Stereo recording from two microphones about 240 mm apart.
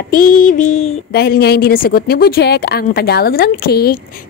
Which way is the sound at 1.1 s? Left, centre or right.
Left.